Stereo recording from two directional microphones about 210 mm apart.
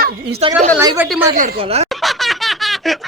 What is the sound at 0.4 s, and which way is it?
Speech, 30° right (ahead or behind).